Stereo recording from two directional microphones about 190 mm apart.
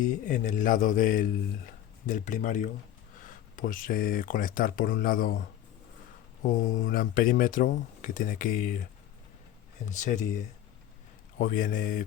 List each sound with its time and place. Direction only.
0.0 s speech: 40° left (ahead or behind)
6.5 s speech: 45° left (ahead or behind)
9.9 s speech: 40° left (ahead or behind)